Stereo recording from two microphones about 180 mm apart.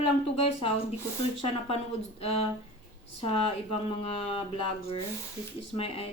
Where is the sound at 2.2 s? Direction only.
35° left (ahead or behind).